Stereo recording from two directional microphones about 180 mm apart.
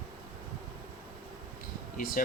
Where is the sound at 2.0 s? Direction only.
50° left (ahead or behind).